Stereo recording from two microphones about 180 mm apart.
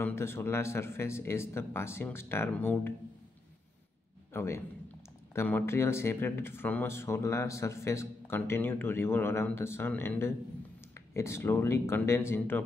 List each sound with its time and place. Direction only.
0.0 s speech: 15° left (ahead or behind)
4.3 s a man's voice: 15° left (ahead or behind)